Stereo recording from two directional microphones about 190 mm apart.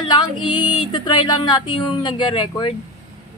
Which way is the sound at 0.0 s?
25° left (ahead or behind).